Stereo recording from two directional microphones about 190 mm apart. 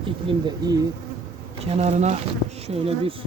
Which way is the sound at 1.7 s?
35° right (ahead or behind).